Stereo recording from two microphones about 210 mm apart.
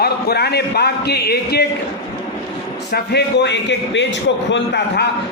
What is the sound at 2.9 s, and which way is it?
A man's voice, 55° left (ahead or behind).